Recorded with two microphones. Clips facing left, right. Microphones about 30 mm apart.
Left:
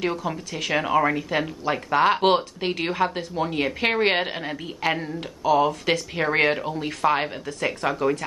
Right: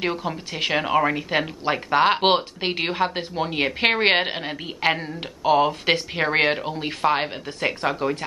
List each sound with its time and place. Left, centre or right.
0.0 s speech: right
0.7 s speech: centre
1.6 s speech: right
7.9 s speech: centre